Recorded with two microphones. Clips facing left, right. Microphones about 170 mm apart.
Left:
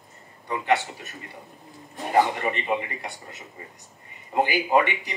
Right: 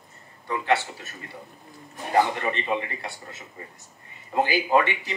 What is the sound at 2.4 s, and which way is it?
Speech, 15° left (ahead or behind).